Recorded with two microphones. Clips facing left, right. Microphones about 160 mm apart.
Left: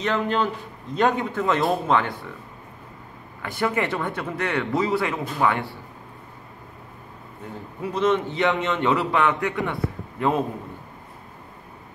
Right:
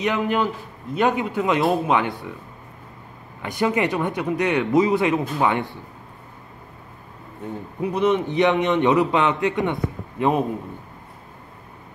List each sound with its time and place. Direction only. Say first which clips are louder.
0.0 s speech: right 2 dB; 15° right (ahead or behind)
3.4 s a man's voice: right 3 dB; 20° right (ahead or behind)
7.8 s a man's voice: right 2 dB; 15° right (ahead or behind)